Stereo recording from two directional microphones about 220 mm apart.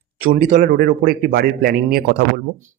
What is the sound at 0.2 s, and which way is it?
A man's voice, 35° right (ahead or behind).